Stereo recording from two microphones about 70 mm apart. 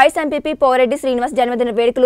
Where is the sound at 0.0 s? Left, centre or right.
Centre.